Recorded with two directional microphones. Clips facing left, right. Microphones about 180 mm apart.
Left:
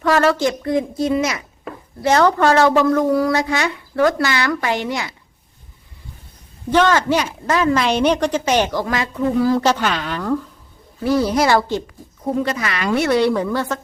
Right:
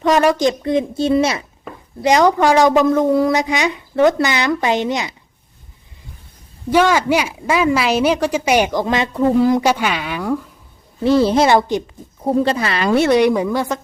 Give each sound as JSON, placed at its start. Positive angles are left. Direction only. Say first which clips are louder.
{"t": 0.0, "sound": "a woman's voice", "louder": "right 2 dB", "side_deg": -15}
{"t": 2.0, "sound": "a woman's voice", "louder": "right 2 dB", "side_deg": -15}
{"t": 6.7, "sound": "a woman's voice", "louder": "right 1 dB", "side_deg": -10}
{"t": 11.0, "sound": "a woman's voice", "louder": "right 3 dB", "side_deg": -25}
{"t": 12.2, "sound": "a woman's voice", "louder": "right 4 dB", "side_deg": -30}
{"t": 13.1, "sound": "a woman's voice", "louder": "right 3 dB", "side_deg": -15}